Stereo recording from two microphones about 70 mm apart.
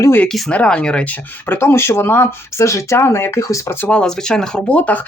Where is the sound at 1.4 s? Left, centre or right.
Left.